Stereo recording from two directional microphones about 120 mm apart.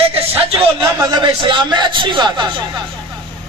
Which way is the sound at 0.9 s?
35° right (ahead or behind).